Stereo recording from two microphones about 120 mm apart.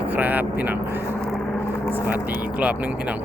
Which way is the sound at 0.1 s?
15° right (ahead or behind).